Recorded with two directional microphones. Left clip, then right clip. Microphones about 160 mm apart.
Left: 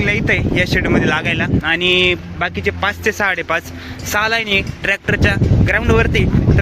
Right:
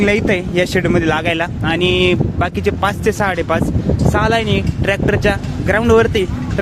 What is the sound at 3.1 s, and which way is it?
Speech, 15° right (ahead or behind).